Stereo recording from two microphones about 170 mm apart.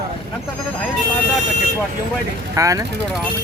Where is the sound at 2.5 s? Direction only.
20° right (ahead or behind).